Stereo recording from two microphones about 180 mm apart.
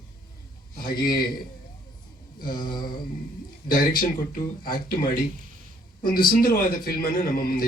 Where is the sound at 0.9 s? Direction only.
55° left (ahead or behind).